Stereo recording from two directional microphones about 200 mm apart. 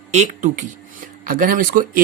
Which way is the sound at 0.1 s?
40° right (ahead or behind).